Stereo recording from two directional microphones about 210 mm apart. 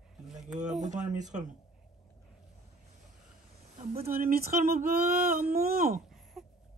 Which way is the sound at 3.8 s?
40° right (ahead or behind).